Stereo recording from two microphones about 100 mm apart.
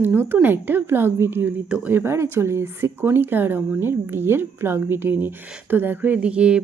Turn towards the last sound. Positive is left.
turn(degrees=-10)  # may be behind; listen again after turning